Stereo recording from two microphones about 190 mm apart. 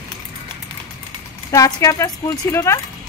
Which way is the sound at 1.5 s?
15° left (ahead or behind).